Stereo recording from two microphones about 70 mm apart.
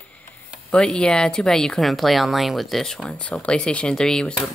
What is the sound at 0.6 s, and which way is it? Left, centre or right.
Speech, centre.